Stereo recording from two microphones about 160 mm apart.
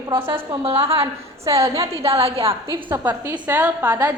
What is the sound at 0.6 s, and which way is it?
A woman's voice, 35° right (ahead or behind).